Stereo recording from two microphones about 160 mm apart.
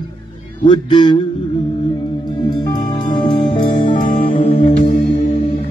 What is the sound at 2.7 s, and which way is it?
Music, 25° left (ahead or behind).